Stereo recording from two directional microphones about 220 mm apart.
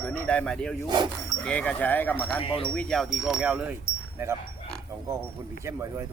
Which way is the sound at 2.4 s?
25° left (ahead or behind).